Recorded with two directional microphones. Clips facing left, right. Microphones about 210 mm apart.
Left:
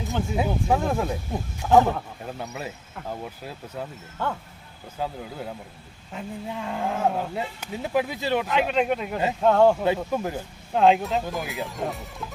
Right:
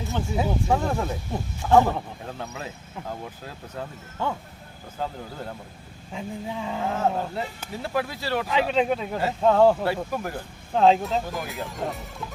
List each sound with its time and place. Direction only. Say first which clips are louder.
0.1 s speech: left 1 dB; centre (ahead or behind)
4.9 s speech: left 1 dB; 10° left (ahead or behind)
6.1 s speech: right 1 dB; 5° right (ahead or behind)
6.8 s speech: even; 10° left (ahead or behind)
9.8 s speech: left 3 dB; 20° left (ahead or behind)
10.8 s speech: even; 5° left (ahead or behind)